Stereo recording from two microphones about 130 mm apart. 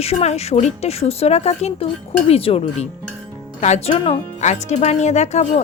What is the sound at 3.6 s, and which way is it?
A woman's voice, 60° left (ahead or behind).